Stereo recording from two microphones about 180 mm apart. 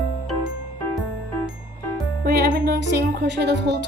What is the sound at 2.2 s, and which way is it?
Speech, 65° right (ahead or behind).